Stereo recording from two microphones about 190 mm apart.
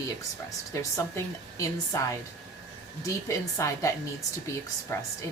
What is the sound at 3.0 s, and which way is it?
Speech, 15° left (ahead or behind).